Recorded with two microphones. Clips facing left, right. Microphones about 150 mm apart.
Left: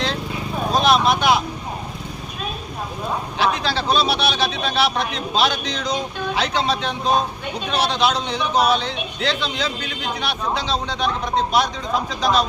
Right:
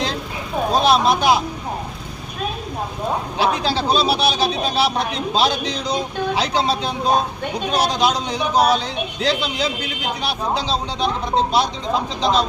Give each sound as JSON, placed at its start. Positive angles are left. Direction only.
{"t": 0.7, "sound": "vehicle", "side_deg": -35}
{"t": 3.8, "sound": "a man's voice", "side_deg": -35}